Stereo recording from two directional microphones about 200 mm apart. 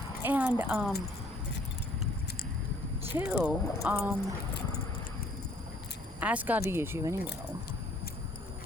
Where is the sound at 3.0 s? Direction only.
10° right (ahead or behind).